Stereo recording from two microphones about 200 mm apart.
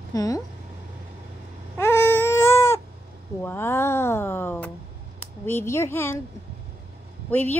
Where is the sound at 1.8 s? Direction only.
10° left (ahead or behind).